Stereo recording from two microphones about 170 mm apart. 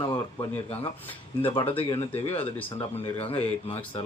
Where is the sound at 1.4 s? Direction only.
30° left (ahead or behind).